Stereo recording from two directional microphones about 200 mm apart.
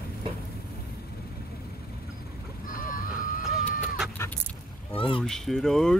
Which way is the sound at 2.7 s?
45° left (ahead or behind).